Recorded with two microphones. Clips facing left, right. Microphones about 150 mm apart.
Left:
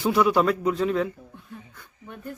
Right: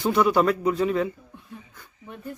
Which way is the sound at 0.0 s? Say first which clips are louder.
Even; centre (ahead or behind).